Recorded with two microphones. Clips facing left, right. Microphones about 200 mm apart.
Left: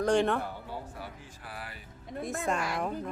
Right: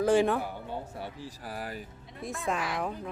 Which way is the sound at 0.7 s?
25° right (ahead or behind).